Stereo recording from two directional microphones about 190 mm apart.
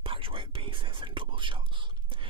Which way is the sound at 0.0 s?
30° right (ahead or behind).